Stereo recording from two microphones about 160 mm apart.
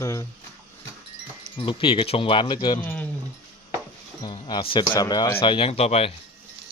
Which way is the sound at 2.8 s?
10° left (ahead or behind).